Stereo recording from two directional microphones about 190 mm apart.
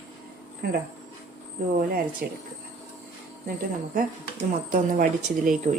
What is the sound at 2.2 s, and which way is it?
Speech, 55° right (ahead or behind).